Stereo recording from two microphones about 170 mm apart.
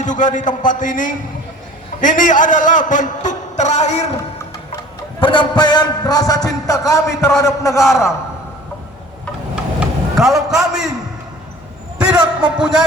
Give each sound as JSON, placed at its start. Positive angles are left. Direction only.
{"t": 0.0, "sound": "a man's voice", "side_deg": 45}
{"t": 5.2, "sound": "a man's voice", "side_deg": 30}
{"t": 7.8, "sound": "speech", "side_deg": 0}
{"t": 9.8, "sound": "a man's voice", "side_deg": 0}
{"t": 11.9, "sound": "a sound", "side_deg": -5}
{"t": 12.5, "sound": "speech", "side_deg": -5}